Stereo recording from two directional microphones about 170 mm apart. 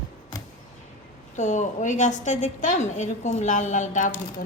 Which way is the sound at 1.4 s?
45° left (ahead or behind).